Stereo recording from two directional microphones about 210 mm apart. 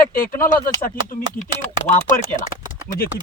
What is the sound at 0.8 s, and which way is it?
Speech, 40° left (ahead or behind).